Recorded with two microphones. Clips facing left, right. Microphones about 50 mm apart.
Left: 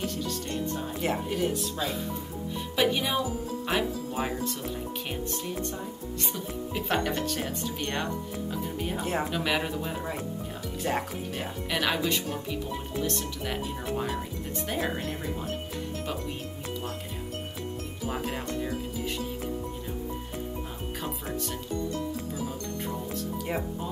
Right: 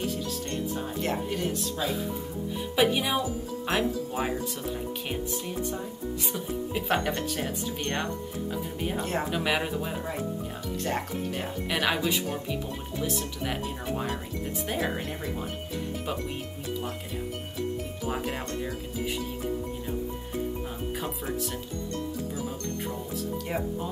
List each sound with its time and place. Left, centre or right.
0.0 s music: centre
2.7 s speech: centre
6.3 s speech: centre
9.3 s speech: centre
10.8 s speech: centre
11.7 s speech: centre
18.0 s speech: centre